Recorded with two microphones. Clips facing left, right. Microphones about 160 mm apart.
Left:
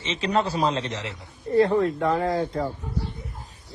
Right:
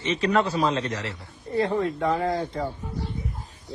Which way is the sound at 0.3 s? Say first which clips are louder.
Even; 35° left (ahead or behind).